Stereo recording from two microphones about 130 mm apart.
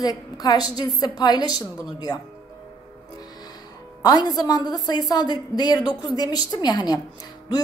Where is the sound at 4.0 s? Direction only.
30° left (ahead or behind).